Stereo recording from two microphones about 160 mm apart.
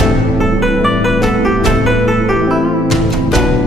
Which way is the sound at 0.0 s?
Centre (ahead or behind).